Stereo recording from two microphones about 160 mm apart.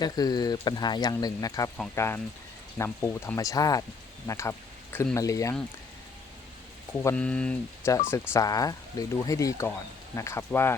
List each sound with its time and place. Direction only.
0.0 s speech: 25° left (ahead or behind)
7.0 s speech: 10° left (ahead or behind)
8.3 s speech: 20° left (ahead or behind)